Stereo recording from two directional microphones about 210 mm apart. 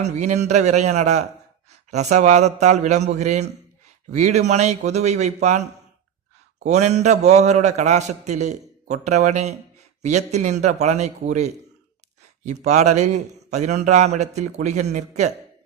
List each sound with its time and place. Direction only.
0.0 s a man's voice: 35° right (ahead or behind)
6.7 s a man's voice: 35° right (ahead or behind)